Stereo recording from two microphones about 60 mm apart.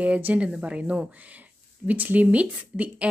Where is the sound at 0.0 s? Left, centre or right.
Right.